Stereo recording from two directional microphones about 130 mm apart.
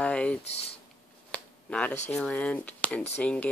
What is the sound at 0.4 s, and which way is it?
Speech, 50° left (ahead or behind).